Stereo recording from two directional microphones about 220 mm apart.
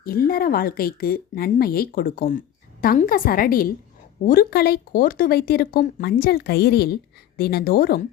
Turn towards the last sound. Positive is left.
turn(degrees=45)  # may be behind; listen again after turning